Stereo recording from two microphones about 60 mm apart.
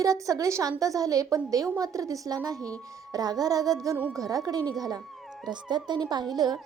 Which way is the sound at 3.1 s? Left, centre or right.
Right.